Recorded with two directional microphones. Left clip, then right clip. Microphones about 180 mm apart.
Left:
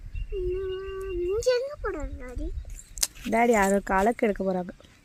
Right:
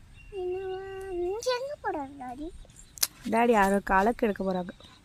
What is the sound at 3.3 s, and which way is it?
Speech, 10° left (ahead or behind).